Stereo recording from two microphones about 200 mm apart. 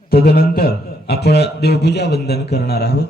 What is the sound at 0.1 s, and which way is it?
A man's voice, 50° left (ahead or behind).